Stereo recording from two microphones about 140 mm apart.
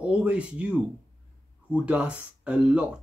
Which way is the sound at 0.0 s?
10° right (ahead or behind).